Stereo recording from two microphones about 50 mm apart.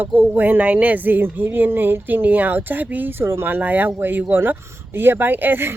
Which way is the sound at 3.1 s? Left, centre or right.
Right.